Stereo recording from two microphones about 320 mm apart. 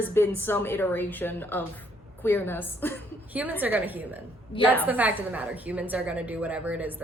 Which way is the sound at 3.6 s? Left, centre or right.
Centre.